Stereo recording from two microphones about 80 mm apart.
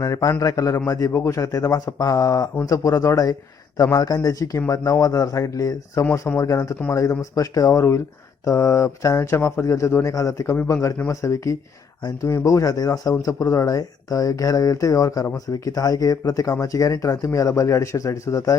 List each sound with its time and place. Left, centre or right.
0.0 s speech: left
1.5 s speech: left
10.4 s speech: left